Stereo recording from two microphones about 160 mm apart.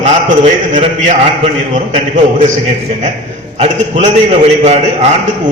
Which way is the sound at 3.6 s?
50° right (ahead or behind).